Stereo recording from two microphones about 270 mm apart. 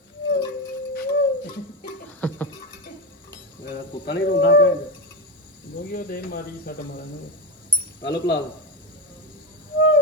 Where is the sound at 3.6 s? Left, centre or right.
Left.